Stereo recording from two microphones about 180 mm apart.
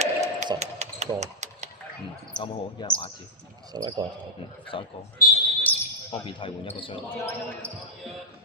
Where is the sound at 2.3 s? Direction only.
25° left (ahead or behind).